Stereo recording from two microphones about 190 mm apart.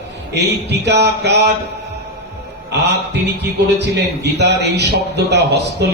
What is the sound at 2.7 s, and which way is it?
Speech, 60° right (ahead or behind).